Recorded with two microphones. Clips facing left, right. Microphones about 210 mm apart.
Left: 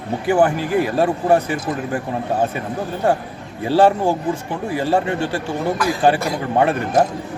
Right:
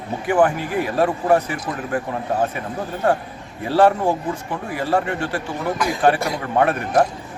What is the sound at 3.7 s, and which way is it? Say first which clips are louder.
Speech: left 1 dB; 25° left (ahead or behind).